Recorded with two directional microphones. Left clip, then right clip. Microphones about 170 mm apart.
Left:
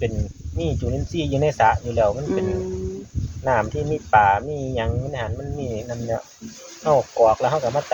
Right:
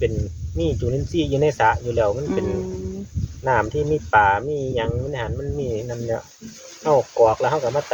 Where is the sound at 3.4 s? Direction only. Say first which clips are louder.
Right 1 dB; 35° right (ahead or behind).